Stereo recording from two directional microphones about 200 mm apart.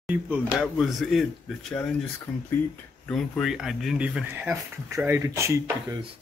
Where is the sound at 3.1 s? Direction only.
Centre (ahead or behind); by 5.9 s 15° right (ahead or behind).